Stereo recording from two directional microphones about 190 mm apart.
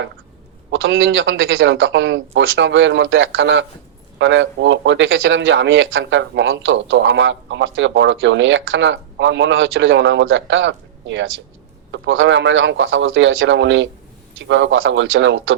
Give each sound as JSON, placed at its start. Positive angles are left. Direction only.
{"t": 0.7, "sound": "a man's voice", "side_deg": -90}